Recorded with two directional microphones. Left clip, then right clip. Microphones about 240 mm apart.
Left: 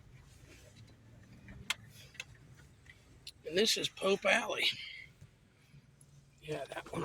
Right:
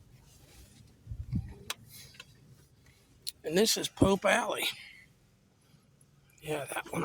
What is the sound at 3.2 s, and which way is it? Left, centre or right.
Speech, right.